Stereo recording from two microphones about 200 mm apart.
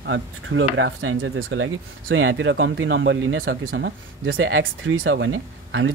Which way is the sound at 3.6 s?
50° right (ahead or behind).